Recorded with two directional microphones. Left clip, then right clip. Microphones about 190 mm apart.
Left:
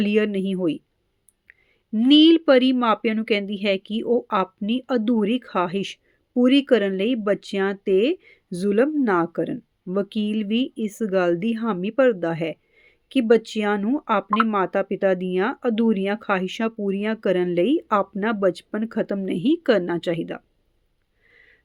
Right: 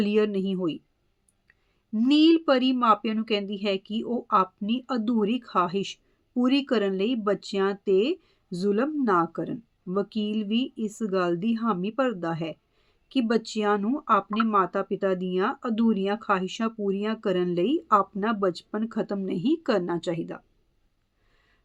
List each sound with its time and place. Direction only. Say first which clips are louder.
0.0 s speech: left 3 dB; 15° left (ahead or behind)
21.2 s sniff: left 13 dB; 20° left (ahead or behind)